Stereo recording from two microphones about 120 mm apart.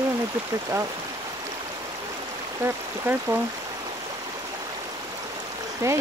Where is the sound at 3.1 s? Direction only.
15° right (ahead or behind).